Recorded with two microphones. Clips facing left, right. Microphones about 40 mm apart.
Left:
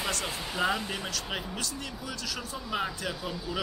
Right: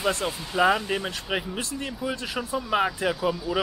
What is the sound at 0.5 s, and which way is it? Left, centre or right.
Speech, right.